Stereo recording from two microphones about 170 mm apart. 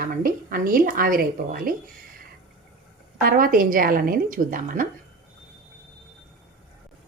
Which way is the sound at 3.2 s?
55° right (ahead or behind).